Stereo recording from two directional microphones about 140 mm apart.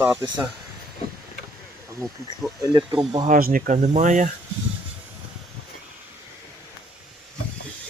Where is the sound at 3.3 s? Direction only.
85° right; by 4.3 s 60° right (ahead or behind).